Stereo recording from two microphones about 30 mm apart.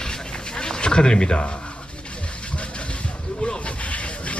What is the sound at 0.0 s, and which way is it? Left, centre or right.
Rub, left.